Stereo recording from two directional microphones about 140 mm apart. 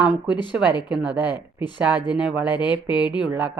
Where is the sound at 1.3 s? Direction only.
30° left (ahead or behind).